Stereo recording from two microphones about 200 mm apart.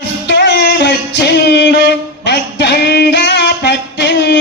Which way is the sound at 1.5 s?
55° left (ahead or behind).